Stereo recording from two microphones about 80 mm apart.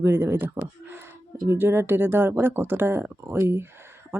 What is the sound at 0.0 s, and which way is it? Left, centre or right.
Speech, right.